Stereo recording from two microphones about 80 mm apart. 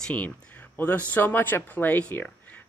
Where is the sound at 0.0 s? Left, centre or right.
Centre.